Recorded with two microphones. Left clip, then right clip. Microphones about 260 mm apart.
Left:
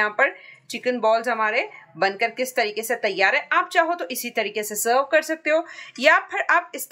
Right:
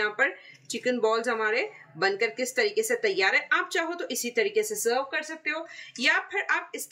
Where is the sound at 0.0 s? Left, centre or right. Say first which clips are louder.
Left 6 dB; centre.